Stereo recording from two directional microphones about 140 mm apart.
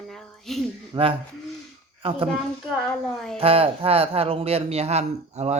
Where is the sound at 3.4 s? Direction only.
45° right (ahead or behind).